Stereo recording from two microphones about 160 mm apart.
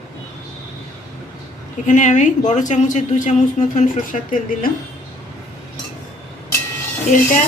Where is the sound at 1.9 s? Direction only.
50° left (ahead or behind).